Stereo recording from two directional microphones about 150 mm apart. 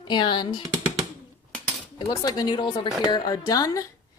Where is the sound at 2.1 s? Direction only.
25° left (ahead or behind).